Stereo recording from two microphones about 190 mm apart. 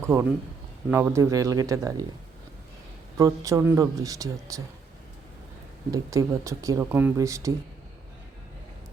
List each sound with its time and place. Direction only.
0.0 s speech: 15° right (ahead or behind)
3.2 s speech: 15° right (ahead or behind)
5.9 s speech: 15° right (ahead or behind)